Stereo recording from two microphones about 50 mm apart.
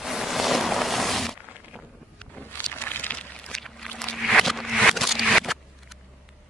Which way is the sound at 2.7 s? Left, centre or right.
Left.